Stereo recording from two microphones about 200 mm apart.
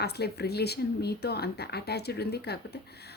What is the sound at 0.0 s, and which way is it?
A woman's voice, 55° left (ahead or behind).